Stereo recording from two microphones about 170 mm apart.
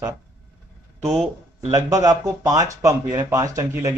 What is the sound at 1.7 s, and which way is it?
A man's voice, 20° right (ahead or behind).